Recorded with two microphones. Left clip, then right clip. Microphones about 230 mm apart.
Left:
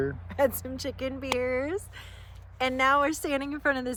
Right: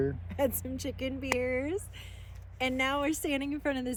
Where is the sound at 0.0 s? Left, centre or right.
Left.